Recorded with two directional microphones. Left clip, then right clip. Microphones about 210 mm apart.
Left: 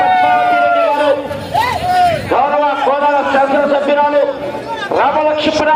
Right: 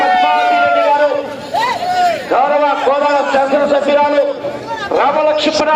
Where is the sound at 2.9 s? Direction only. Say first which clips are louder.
Even; 50° right (ahead or behind).